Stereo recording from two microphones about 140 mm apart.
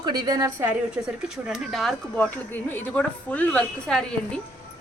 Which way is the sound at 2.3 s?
15° left (ahead or behind).